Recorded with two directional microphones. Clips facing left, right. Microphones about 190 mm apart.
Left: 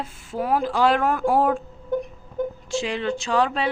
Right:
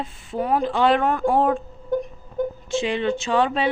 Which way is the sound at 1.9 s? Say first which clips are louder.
Right 2 dB; 35° right (ahead or behind).